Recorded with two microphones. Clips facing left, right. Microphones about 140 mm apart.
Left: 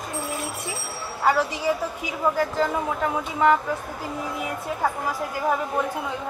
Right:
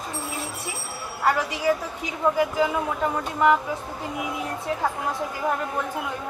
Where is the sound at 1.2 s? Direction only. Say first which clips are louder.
Left 1 dB; 5° left (ahead or behind).